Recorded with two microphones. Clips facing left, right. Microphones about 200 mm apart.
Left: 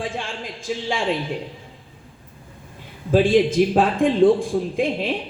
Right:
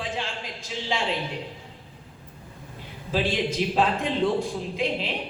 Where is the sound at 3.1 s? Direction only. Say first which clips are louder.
Left 10 dB; 50° left (ahead or behind).